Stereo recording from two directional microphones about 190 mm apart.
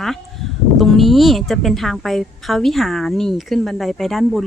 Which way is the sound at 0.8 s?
Centre (ahead or behind).